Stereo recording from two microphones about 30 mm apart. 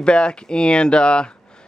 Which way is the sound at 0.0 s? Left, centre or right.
Left.